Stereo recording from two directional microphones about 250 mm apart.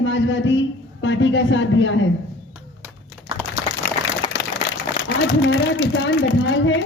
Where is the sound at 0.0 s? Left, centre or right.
Left.